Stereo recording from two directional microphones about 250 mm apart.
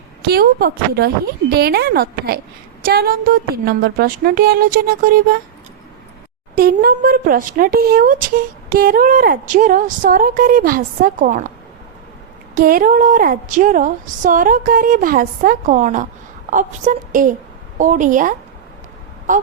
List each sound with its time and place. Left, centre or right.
0.3 s a woman's voice: right
6.6 s a woman's voice: right
12.5 s a woman's voice: right